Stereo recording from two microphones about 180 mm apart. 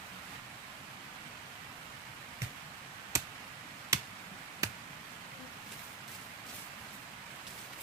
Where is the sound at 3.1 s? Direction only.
15° right (ahead or behind).